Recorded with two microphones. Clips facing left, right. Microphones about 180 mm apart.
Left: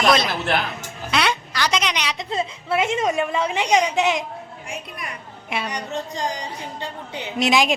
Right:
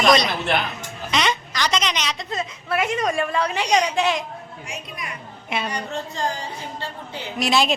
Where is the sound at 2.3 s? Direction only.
25° left (ahead or behind).